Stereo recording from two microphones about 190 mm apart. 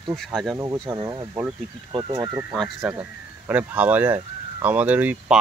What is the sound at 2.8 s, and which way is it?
Speech, 5° right (ahead or behind).